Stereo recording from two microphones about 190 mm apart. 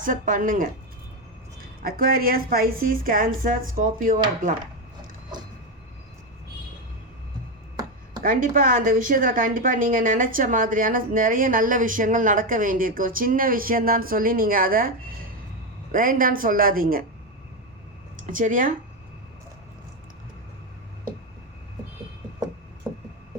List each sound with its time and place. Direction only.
0.0 s a woman's voice: 45° right (ahead or behind)
1.8 s a woman's voice: 50° right (ahead or behind)
8.2 s a woman's voice: 45° right (ahead or behind)
18.3 s a woman's voice: 45° right (ahead or behind)